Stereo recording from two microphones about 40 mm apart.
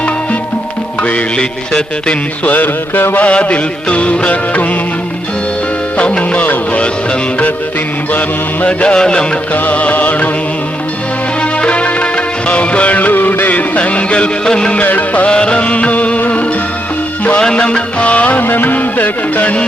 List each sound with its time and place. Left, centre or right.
1.4 s music: centre
2.4 s music: left
3.2 s music: left
6.0 s music: left
8.6 s music: left
9.6 s music: left
11.6 s music of bollywood: left
13.5 s music: left
14.4 s music: centre
14.8 s music: left
15.3 s music: left
17.4 s music: left
18.4 s music: left